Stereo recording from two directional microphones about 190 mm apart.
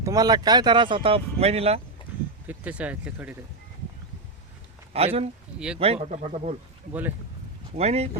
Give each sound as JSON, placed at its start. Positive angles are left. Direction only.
{"t": 0.0, "sound": "speech", "side_deg": -20}
{"t": 2.5, "sound": "speech", "side_deg": -10}
{"t": 4.9, "sound": "speech", "side_deg": -30}
{"t": 5.5, "sound": "speech", "side_deg": -5}
{"t": 5.8, "sound": "speech", "side_deg": -35}
{"t": 7.8, "sound": "speech", "side_deg": -35}